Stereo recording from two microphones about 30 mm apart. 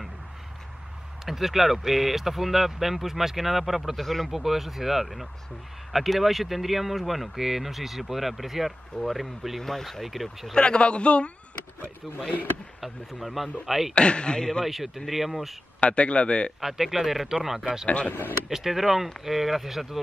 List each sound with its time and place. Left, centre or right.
1.2 s speech: centre
4.0 s speech: centre
4.3 s speech: centre
9.6 s speech: centre
10.5 s a man's voice: left
12.8 s speech: centre
13.9 s a man's voice: left
15.0 s speech: centre
15.8 s a man's voice: left
16.6 s speech: centre
17.8 s speech: left
18.5 s speech: centre